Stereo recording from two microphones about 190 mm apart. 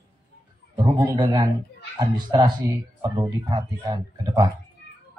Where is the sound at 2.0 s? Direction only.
20° right (ahead or behind).